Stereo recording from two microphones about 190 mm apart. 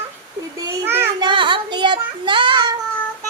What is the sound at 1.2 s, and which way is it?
Child singing, 25° right (ahead or behind).